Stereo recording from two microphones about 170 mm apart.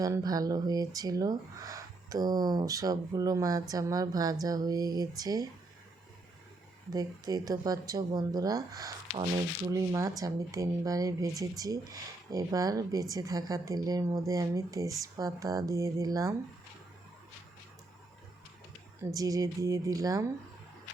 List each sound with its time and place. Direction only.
0.0 s speech: 20° right (ahead or behind)
6.9 s speech: 20° right (ahead or behind)
19.1 s speech: 20° right (ahead or behind)